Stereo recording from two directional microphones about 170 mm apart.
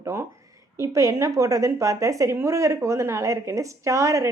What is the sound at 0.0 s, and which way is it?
A woman's voice, 15° right (ahead or behind).